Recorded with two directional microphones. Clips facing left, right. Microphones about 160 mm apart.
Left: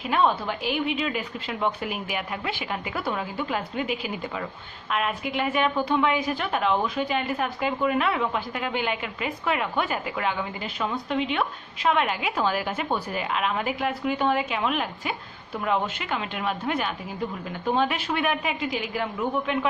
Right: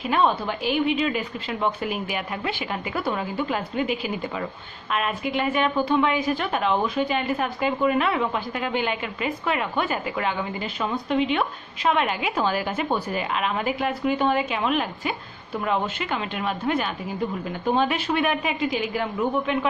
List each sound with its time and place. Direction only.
0.1 s a woman's voice: 5° left (ahead or behind)